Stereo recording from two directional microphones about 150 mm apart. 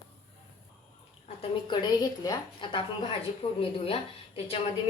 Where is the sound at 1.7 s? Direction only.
30° left (ahead or behind).